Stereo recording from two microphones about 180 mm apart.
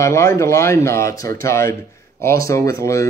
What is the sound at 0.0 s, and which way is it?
Speech, 15° left (ahead or behind).